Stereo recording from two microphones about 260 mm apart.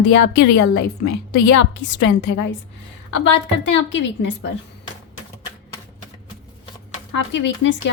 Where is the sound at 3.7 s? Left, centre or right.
Left.